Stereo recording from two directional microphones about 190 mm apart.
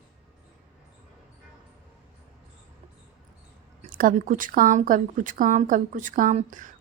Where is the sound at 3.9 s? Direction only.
45° right (ahead or behind).